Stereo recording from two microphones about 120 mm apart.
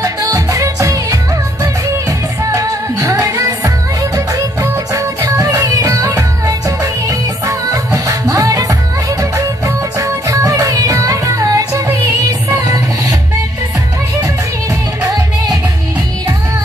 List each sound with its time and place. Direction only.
0.0 s music: 30° right (ahead or behind)
15.0 s music: 30° right (ahead or behind)